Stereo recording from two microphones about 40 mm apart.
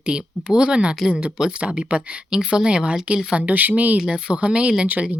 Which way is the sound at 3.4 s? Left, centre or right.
Right.